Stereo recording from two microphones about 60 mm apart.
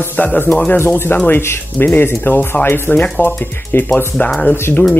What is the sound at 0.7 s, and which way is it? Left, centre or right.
Speech, left.